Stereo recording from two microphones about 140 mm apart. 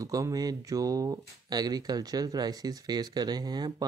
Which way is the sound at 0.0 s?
25° right (ahead or behind).